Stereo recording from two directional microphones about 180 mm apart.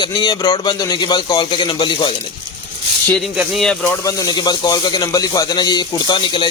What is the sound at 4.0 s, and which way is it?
Speech, 20° left (ahead or behind).